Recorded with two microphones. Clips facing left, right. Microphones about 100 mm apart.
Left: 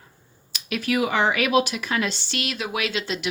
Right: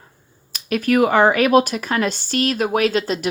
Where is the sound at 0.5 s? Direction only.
45° right (ahead or behind).